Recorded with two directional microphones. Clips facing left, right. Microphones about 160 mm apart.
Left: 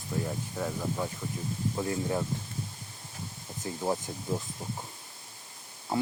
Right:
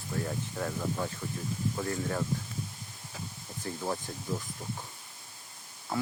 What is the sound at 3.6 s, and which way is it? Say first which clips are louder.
Speech: left 3 dB; 20° left (ahead or behind).